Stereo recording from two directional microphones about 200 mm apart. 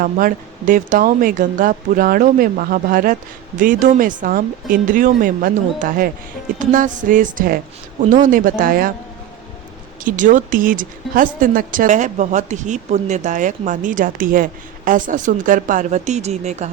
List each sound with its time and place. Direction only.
0.0 s speech: 45° right (ahead or behind)
10.0 s speech: 40° right (ahead or behind)